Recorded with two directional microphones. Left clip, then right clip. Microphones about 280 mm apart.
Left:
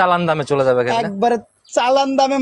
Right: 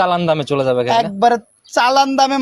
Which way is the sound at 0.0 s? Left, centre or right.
Centre.